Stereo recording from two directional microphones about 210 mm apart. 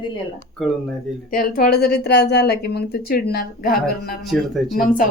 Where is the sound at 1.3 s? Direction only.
45° left (ahead or behind).